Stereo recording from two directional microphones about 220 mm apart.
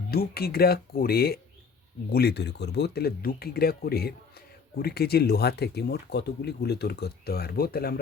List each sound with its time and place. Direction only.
0.1 s speech: 45° left (ahead or behind)